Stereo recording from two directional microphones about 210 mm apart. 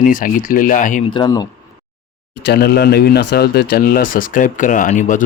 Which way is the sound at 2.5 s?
50° left (ahead or behind).